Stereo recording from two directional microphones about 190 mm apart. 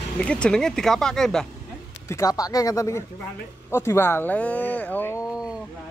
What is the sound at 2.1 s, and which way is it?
Speech, 20° left (ahead or behind).